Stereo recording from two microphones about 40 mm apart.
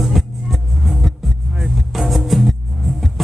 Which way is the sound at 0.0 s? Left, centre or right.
Centre.